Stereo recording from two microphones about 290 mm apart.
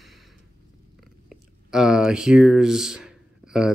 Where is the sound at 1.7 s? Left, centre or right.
Centre.